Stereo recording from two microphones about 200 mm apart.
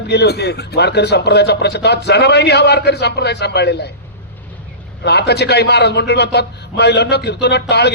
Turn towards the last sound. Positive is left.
turn(degrees=55)  # may be behind; listen again after turning